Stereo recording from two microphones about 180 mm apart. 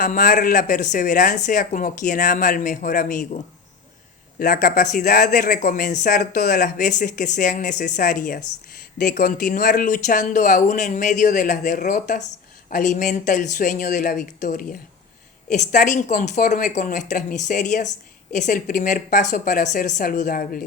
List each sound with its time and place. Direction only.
0.0 s speech: 50° left (ahead or behind)